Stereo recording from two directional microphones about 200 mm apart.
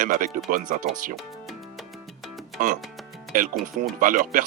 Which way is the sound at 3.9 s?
40° right (ahead or behind).